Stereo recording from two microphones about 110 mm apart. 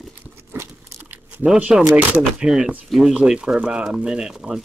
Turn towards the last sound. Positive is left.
turn(degrees=-5)  # may be behind; listen again after turning